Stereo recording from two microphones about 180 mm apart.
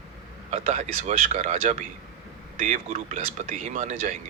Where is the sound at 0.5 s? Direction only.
40° right (ahead or behind).